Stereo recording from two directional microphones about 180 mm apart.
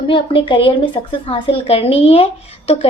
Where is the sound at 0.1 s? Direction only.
30° left (ahead or behind).